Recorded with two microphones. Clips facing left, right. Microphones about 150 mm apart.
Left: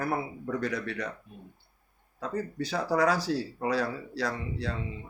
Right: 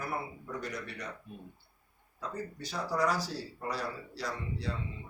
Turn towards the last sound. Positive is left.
turn(degrees=75)  # may be behind; listen again after turning